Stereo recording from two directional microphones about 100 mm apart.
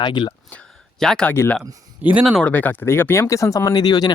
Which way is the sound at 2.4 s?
15° left (ahead or behind).